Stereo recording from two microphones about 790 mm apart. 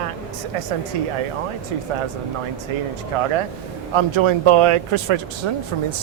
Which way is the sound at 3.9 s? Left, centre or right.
Right.